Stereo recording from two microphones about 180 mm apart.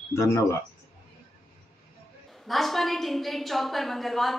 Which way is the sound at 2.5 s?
Centre (ahead or behind).